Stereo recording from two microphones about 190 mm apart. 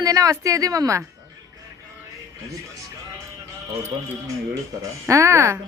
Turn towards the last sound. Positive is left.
turn(degrees=-15)  # may be behind; listen again after turning